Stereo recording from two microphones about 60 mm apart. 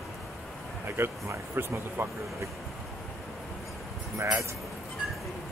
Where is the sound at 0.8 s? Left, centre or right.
Right.